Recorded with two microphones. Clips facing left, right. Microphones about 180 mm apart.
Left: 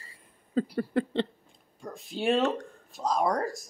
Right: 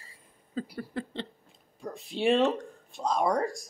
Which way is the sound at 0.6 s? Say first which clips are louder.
Left 8 dB; 65° left (ahead or behind).